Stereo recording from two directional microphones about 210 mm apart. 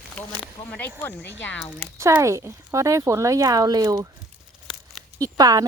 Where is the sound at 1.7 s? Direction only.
15° right (ahead or behind).